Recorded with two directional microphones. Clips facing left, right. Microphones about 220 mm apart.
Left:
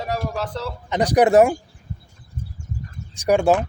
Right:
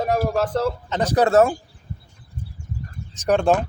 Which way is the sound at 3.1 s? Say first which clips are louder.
Left 1 dB; 10° left (ahead or behind).